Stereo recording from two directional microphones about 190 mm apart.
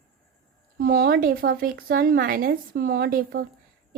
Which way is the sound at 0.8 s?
50° right (ahead or behind).